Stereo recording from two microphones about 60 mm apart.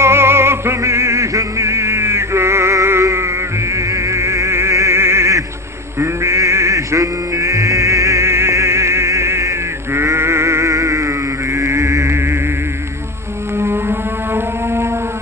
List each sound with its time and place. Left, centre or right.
0.0 s music: right
13.6 s music: right